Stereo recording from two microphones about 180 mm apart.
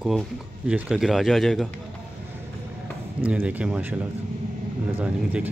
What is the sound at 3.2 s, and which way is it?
Speech, 10° right (ahead or behind).